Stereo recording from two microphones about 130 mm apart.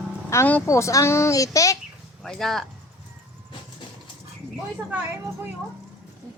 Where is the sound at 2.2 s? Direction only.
Centre (ahead or behind).